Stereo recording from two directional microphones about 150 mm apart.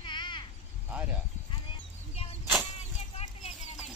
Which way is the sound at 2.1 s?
45° left (ahead or behind).